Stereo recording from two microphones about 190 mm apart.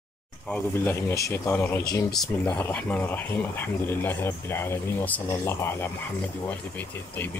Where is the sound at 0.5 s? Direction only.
10° left (ahead or behind).